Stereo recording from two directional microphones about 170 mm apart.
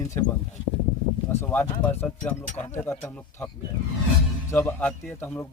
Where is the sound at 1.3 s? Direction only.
10° left (ahead or behind).